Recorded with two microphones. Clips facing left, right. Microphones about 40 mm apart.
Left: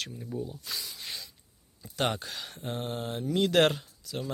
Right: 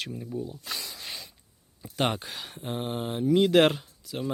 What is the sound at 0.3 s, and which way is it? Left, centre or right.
Speech, centre.